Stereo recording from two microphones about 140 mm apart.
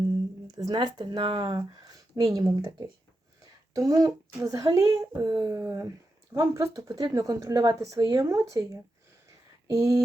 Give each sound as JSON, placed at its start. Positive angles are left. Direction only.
{"t": 0.5, "sound": "speech", "side_deg": -30}